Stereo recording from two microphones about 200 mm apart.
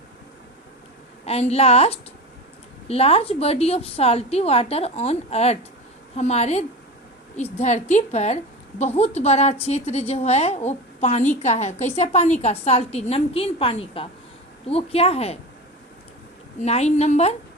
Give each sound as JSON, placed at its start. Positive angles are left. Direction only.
{"t": 1.2, "sound": "a woman's voice", "side_deg": 30}
{"t": 16.6, "sound": "a woman's voice", "side_deg": 35}